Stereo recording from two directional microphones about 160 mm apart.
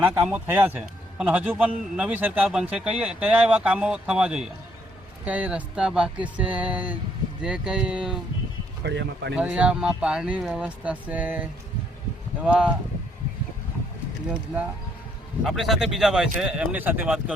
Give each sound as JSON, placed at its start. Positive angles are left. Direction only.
{"t": 0.0, "sound": "a man's voice", "side_deg": -10}
{"t": 8.8, "sound": "speech", "side_deg": -90}
{"t": 9.3, "sound": "a man's voice", "side_deg": -10}
{"t": 15.4, "sound": "speech", "side_deg": 0}